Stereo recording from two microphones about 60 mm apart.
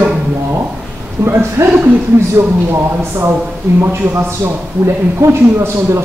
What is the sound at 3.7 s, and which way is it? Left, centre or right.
Speech, right.